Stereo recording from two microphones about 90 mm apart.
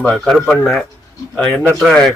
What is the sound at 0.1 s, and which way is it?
Speech, 5° left (ahead or behind).